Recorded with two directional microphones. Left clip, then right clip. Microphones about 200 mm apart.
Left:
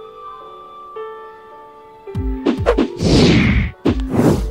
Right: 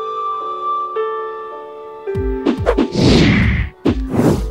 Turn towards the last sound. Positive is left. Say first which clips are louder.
# even
turn(degrees=0)  # may be behind; listen again after turning